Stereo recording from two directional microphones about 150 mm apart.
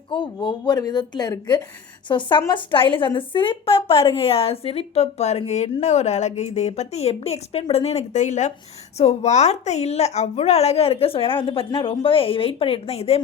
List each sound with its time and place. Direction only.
0.1 s a woman's voice: 30° left (ahead or behind)